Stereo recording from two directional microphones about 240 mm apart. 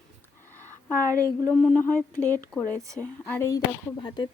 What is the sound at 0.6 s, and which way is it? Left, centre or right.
A woman's voice, centre.